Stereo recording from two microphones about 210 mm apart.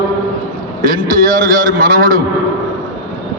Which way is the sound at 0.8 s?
45° right (ahead or behind).